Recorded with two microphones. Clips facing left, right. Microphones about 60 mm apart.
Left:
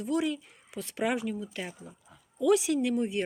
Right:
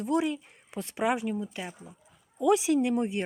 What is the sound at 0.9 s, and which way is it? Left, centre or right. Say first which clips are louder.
Speech: right 2 dB; centre.